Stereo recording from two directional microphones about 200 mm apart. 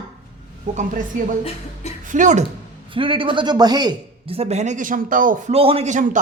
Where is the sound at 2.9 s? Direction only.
25° right (ahead or behind); by 5.5 s 40° right (ahead or behind).